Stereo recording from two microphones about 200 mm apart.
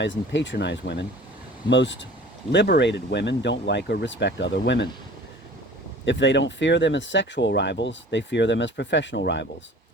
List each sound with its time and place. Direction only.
0.0 s speech: 65° left (ahead or behind)
6.1 s speech: 65° left (ahead or behind)